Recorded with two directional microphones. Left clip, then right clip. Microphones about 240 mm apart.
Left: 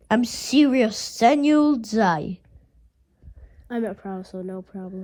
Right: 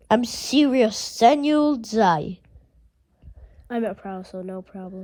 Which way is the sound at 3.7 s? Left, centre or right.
Right.